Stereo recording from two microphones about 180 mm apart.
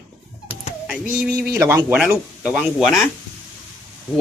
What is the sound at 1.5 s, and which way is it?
Speech, 15° right (ahead or behind).